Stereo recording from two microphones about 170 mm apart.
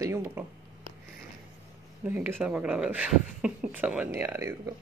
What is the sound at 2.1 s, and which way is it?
Speech, 10° right (ahead or behind).